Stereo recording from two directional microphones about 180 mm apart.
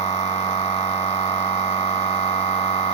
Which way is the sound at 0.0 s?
35° left (ahead or behind).